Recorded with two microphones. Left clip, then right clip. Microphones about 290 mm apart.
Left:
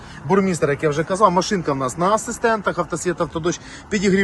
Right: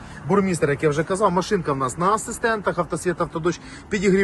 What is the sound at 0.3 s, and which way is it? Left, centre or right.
Speech, centre.